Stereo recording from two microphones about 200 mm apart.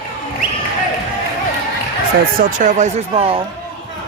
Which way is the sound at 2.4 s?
40° right (ahead or behind).